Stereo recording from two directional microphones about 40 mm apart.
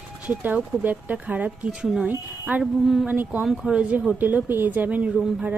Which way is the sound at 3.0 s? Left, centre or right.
Right.